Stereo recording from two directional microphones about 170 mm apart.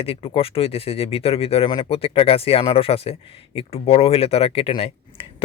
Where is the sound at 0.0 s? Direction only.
35° left (ahead or behind).